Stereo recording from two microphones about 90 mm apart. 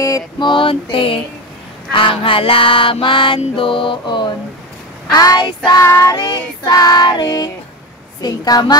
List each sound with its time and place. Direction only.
0.4 s a sound: 65° left (ahead or behind); by 1.2 s 90° left
1.9 s music: 70° left (ahead or behind)
5.1 s child singing: 50° left (ahead or behind)
5.8 s child singing: 30° left (ahead or behind)
6.1 s child singing: 55° left (ahead or behind)
6.7 s child singing: 45° left (ahead or behind)